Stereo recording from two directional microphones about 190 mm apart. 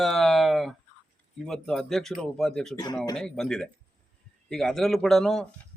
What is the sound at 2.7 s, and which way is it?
Speech, 20° left (ahead or behind).